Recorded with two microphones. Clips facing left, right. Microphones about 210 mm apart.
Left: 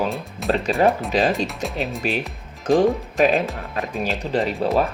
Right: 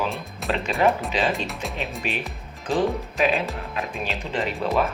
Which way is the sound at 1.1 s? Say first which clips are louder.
Left 5 dB; 40° left (ahead or behind).